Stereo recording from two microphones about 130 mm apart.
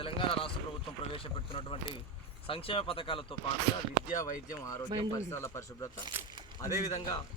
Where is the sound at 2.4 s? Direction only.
45° left (ahead or behind).